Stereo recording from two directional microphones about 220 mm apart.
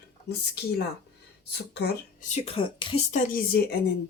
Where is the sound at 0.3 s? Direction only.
50° left (ahead or behind).